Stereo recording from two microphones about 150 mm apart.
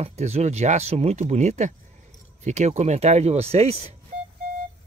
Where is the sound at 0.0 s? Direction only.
45° right (ahead or behind).